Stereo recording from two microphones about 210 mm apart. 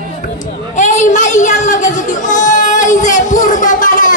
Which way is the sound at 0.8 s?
35° left (ahead or behind).